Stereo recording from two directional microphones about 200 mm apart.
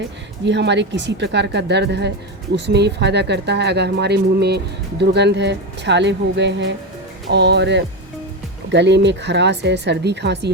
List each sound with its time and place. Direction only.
0.4 s speech: 60° right (ahead or behind)